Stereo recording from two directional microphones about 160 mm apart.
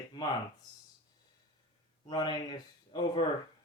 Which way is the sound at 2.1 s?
25° left (ahead or behind).